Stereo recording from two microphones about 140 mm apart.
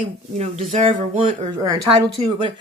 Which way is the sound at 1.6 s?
25° right (ahead or behind).